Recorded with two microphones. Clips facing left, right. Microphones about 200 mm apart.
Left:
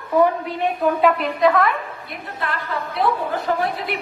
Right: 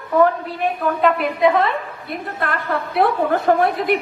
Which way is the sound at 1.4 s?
25° right (ahead or behind).